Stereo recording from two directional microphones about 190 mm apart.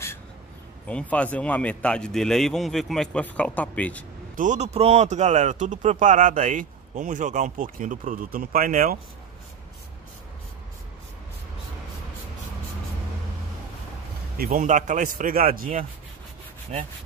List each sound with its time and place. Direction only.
0.8 s a man's voice: 5° left (ahead or behind)
4.4 s speech: 40° right (ahead or behind)
14.3 s a man's voice: 50° right (ahead or behind)
16.7 s speech: 35° right (ahead or behind)